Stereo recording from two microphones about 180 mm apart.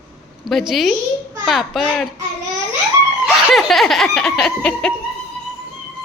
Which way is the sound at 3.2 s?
Centre (ahead or behind).